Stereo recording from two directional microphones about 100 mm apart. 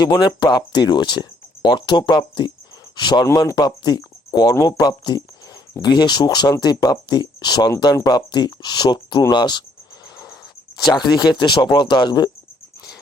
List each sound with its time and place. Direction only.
0.0 s speech: 45° left (ahead or behind)
10.9 s speech: 45° left (ahead or behind)